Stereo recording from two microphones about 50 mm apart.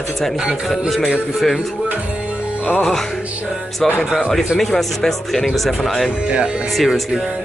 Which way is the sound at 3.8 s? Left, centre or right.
Centre.